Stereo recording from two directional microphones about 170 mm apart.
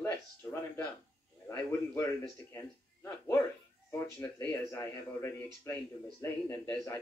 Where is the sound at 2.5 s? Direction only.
15° left (ahead or behind).